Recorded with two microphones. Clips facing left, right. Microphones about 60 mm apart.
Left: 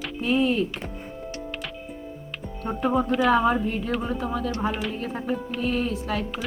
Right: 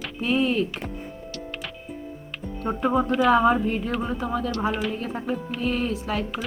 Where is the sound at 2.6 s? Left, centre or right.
Centre.